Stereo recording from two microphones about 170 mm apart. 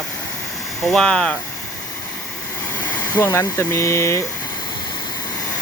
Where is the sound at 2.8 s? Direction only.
10° left (ahead or behind).